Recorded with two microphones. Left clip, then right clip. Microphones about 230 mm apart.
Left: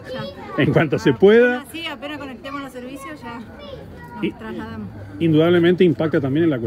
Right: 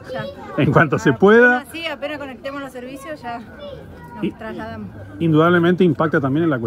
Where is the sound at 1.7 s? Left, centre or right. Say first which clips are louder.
Right 3 dB; centre.